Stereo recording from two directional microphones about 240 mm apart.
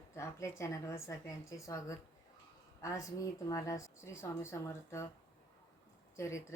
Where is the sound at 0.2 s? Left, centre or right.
Centre.